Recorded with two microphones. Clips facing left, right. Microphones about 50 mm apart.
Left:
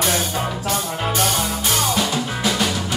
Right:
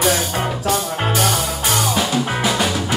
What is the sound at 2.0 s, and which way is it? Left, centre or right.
Music, centre.